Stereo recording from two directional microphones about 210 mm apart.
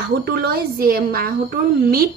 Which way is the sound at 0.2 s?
50° right (ahead or behind).